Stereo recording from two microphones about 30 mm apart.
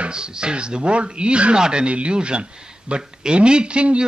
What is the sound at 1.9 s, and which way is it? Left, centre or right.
Speech, right.